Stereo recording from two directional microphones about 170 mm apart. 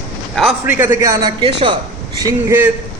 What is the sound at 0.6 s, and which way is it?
A man's voice, 10° right (ahead or behind).